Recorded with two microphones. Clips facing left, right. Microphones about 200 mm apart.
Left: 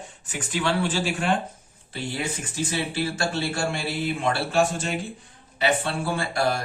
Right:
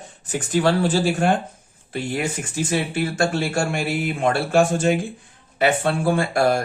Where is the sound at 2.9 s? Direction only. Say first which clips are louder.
Right 5 dB; 50° right (ahead or behind).